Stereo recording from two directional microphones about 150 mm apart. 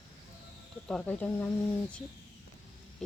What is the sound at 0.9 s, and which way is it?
Speech, 5° left (ahead or behind).